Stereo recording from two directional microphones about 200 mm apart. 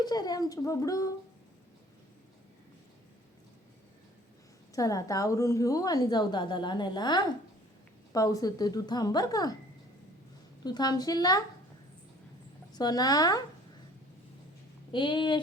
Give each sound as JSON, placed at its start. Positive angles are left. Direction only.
{"t": 0.0, "sound": "a woman's voice", "side_deg": 20}
{"t": 4.7, "sound": "a woman's voice", "side_deg": 15}
{"t": 10.6, "sound": "a woman's voice", "side_deg": 20}
{"t": 12.7, "sound": "a woman's voice", "side_deg": 20}
{"t": 14.9, "sound": "a woman's voice", "side_deg": 25}